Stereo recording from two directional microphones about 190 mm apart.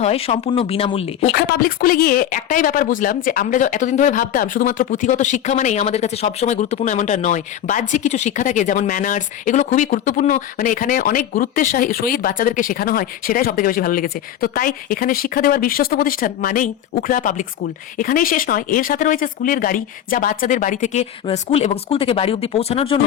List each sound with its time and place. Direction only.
0.0 s speech: 30° left (ahead or behind)
1.3 s speech: 50° left (ahead or behind); by 23.0 s 30° left (ahead or behind)